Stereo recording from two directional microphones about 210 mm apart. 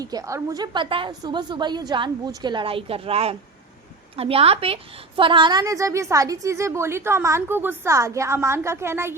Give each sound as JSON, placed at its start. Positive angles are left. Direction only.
{"t": 0.0, "sound": "a woman's voice", "side_deg": -15}